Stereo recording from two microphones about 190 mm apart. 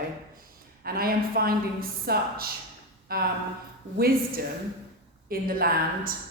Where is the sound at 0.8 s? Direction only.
50° right (ahead or behind).